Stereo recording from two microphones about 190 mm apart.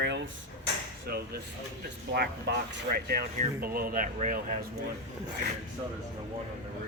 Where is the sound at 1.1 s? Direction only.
55° right (ahead or behind).